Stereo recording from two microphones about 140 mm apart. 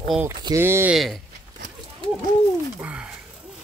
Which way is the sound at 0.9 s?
Centre (ahead or behind).